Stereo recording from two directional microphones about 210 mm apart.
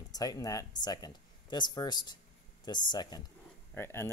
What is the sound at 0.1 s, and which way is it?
Speech, 20° left (ahead or behind).